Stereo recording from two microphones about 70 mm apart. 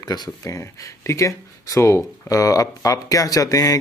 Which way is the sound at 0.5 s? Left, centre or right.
Left.